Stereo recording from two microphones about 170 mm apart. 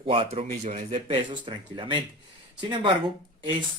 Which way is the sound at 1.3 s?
30° right (ahead or behind).